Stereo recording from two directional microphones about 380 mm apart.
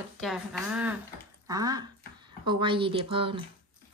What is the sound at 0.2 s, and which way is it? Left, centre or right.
A woman's voice, centre.